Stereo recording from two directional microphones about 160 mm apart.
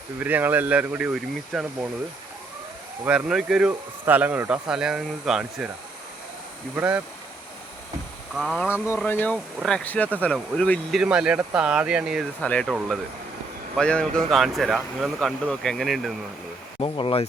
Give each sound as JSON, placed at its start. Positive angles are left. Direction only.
{"t": 0.2, "sound": "speech", "side_deg": -10}
{"t": 3.1, "sound": "speech", "side_deg": -5}
{"t": 6.7, "sound": "speech", "side_deg": -10}
{"t": 8.4, "sound": "speech", "side_deg": 0}
{"t": 9.0, "sound": "speech", "side_deg": 10}
{"t": 12.4, "sound": "speech", "side_deg": 5}
{"t": 13.7, "sound": "speech", "side_deg": 5}
{"t": 16.8, "sound": "speech", "side_deg": 35}